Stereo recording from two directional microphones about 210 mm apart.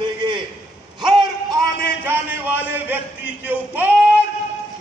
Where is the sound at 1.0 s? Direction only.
20° right (ahead or behind).